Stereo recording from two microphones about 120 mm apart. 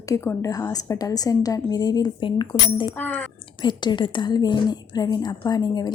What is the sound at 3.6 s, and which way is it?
A woman's voice, 40° left (ahead or behind).